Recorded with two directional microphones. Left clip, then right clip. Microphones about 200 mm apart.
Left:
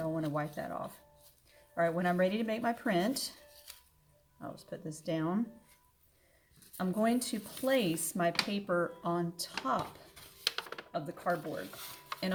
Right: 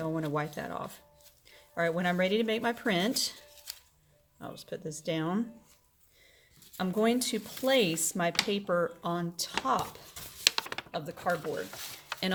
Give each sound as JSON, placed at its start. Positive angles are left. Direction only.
{"t": 0.0, "sound": "speech", "side_deg": -45}
{"t": 4.4, "sound": "speech", "side_deg": -40}
{"t": 6.7, "sound": "speech", "side_deg": -40}